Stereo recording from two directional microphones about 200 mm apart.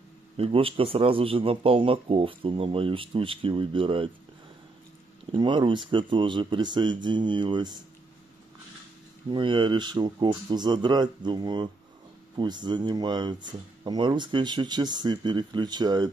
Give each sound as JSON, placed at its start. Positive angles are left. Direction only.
{"t": 0.4, "sound": "a man's voice", "side_deg": -30}
{"t": 5.3, "sound": "a man's voice", "side_deg": -25}
{"t": 9.3, "sound": "a man's voice", "side_deg": -25}